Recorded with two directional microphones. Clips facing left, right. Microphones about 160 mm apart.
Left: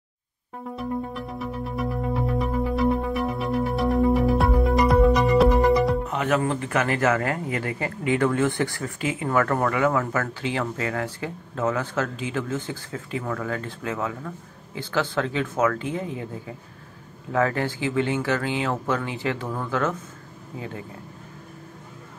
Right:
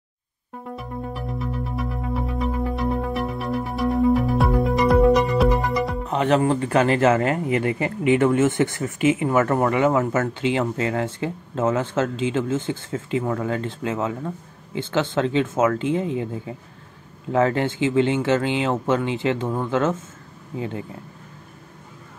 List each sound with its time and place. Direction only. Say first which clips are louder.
0.7 s music: left 3 dB; centre (ahead or behind)
6.0 s speech: right 4 dB; 30° right (ahead or behind)